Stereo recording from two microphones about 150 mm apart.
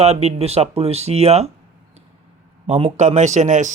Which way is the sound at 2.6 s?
40° right (ahead or behind).